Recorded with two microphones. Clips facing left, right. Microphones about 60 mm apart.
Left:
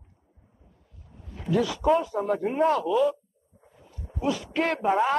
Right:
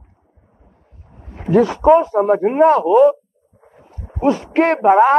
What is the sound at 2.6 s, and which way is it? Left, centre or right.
Speech, right.